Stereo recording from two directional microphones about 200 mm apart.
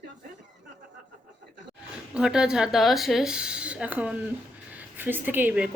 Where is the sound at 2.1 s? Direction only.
5° right (ahead or behind).